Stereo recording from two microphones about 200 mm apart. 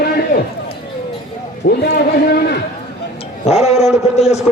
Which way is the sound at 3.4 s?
35° left (ahead or behind).